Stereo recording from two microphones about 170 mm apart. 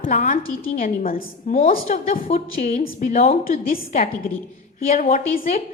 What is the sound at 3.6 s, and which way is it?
A woman's voice, 60° left (ahead or behind).